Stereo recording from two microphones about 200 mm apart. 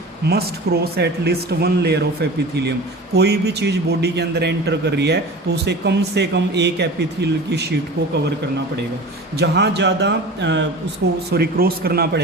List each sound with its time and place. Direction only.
0.3 s speech: 50° right (ahead or behind)
3.2 s a man's voice: 55° right (ahead or behind)
9.4 s a man's voice: 55° right (ahead or behind)